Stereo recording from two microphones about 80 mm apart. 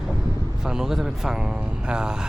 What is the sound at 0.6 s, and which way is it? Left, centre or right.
Vehicle, centre.